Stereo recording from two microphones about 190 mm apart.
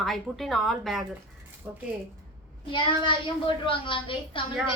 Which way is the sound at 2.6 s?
25° left (ahead or behind).